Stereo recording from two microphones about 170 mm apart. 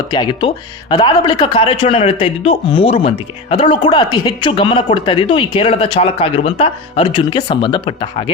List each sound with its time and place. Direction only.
0.1 s speech: 25° left (ahead or behind)